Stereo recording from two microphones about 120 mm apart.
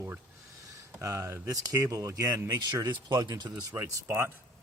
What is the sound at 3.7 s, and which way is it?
Speech, 15° right (ahead or behind).